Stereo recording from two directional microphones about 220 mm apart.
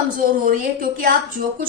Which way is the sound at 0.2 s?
40° right (ahead or behind).